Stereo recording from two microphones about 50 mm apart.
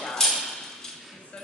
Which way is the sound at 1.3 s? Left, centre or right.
Left.